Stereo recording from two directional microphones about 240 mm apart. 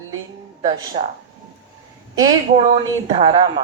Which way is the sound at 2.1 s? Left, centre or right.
Centre.